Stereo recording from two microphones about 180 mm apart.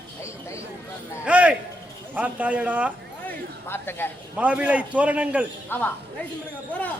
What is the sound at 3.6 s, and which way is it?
Speech, 10° left (ahead or behind).